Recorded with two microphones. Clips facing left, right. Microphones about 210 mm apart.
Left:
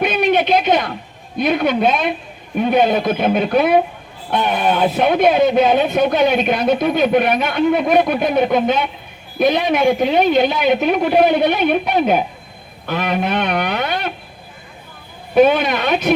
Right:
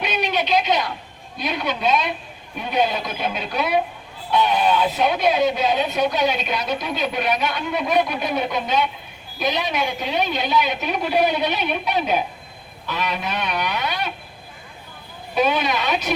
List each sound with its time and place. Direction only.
0.0 s a sound: 55° left (ahead or behind)
1.4 s speech: 55° left (ahead or behind)
15.4 s speech: 55° left (ahead or behind)